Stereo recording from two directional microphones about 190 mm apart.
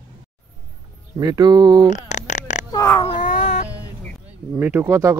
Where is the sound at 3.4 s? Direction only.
35° left (ahead or behind).